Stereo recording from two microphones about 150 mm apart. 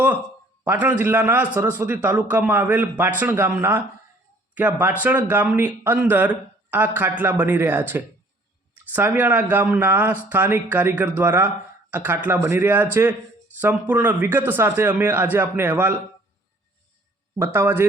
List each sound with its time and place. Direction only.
0.6 s speech: 10° right (ahead or behind)
17.3 s speech: 15° right (ahead or behind)